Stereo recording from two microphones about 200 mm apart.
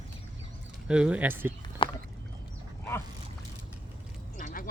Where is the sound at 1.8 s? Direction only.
25° left (ahead or behind).